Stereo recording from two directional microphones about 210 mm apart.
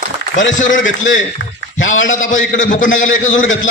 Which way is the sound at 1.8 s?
65° left (ahead or behind).